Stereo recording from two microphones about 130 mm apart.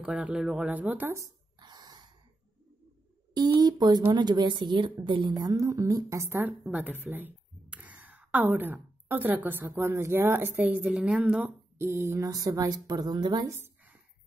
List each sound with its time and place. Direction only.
0.0 s speech: 10° right (ahead or behind)
1.6 s gasp: 35° right (ahead or behind)
3.3 s a woman's voice: 30° right (ahead or behind)